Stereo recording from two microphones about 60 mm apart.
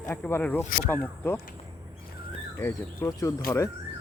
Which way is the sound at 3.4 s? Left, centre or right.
Left.